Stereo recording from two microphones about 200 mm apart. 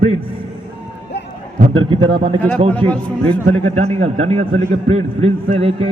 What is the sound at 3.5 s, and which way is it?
A man's voice, 30° right (ahead or behind).